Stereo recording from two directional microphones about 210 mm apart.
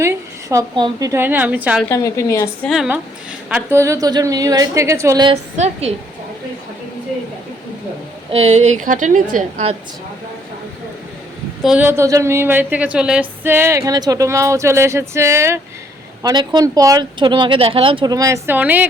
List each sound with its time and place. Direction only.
0.0 s speech: 15° right (ahead or behind)
1.8 s a woman's voice: 15° left (ahead or behind)
2.6 s speech: 5° right (ahead or behind); by 5.4 s 20° right (ahead or behind)
5.5 s a woman's voice: 30° right (ahead or behind)
8.3 s a woman's voice: 30° right (ahead or behind)
11.6 s speech: 5° right (ahead or behind)